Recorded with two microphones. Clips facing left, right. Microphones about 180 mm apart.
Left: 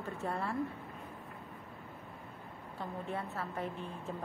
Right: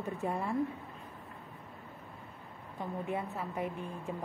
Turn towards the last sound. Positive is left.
turn(degrees=-15)  # may be behind; listen again after turning